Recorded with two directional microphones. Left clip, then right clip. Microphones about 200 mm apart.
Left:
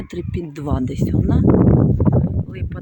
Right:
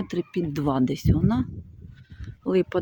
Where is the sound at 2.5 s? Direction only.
5° right (ahead or behind).